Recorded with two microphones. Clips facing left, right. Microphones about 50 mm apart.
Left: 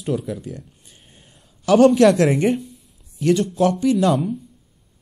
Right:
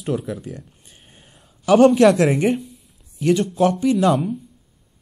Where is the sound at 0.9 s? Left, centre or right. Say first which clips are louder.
Right 3 dB; right.